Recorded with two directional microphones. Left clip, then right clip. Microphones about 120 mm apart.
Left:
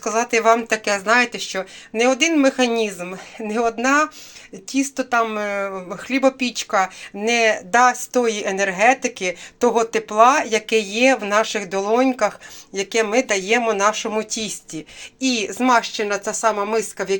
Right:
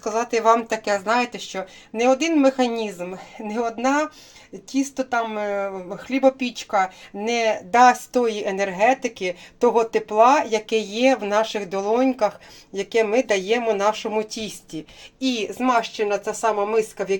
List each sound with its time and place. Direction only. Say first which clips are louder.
0.0 s speech: left 2 dB; 10° right (ahead or behind)
15.2 s a woman's voice: left 3 dB; 5° right (ahead or behind)